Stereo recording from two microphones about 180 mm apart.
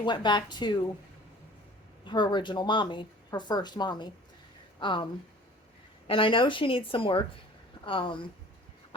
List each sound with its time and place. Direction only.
0.0 s speech: 25° left (ahead or behind)
2.0 s speech: 25° left (ahead or behind)
6.1 s speech: 30° left (ahead or behind)